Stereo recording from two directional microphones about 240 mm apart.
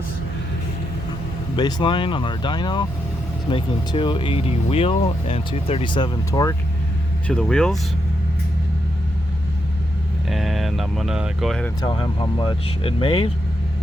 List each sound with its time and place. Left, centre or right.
1.5 s speech: left
7.3 s speech: centre
10.2 s speech: centre
11.8 s speech: centre